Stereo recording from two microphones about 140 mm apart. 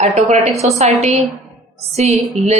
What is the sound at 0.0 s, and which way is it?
Speech, 55° right (ahead or behind).